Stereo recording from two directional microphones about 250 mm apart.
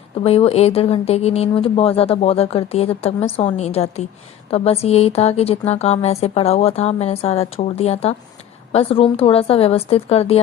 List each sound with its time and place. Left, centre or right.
0.2 s speech: left